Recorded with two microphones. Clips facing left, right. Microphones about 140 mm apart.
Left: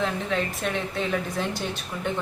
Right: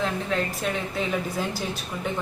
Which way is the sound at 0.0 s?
Centre (ahead or behind).